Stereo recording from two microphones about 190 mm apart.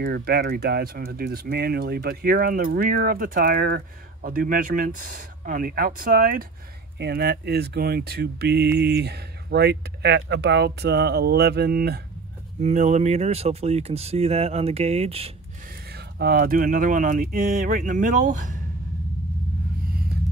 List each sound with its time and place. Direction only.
0.0 s speech: 55° right (ahead or behind)
7.0 s speech: 60° right (ahead or behind)
12.6 s speech: 40° right (ahead or behind)
15.7 s speech: 55° right (ahead or behind); by 18.6 s 40° right (ahead or behind)